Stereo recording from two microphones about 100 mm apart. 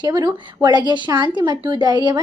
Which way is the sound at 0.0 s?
45° right (ahead or behind).